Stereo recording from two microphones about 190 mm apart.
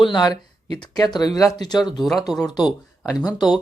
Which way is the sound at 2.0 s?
Centre (ahead or behind).